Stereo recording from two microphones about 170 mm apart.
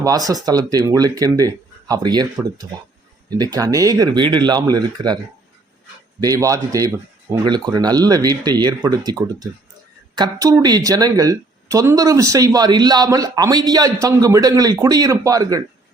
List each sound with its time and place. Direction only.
0.0 s speech: 20° right (ahead or behind)